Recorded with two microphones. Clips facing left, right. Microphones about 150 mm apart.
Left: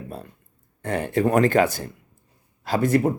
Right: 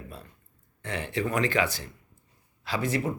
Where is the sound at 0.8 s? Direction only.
45° left (ahead or behind).